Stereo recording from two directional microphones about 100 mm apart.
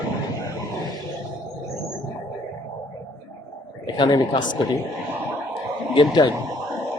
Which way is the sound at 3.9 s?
50° left (ahead or behind).